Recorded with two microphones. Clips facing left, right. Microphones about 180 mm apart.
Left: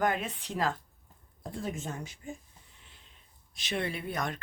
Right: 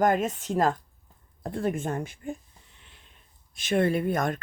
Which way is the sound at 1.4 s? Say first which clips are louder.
Right 8 dB; 60° right (ahead or behind).